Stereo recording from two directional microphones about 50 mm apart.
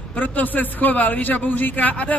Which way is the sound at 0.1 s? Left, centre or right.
Left.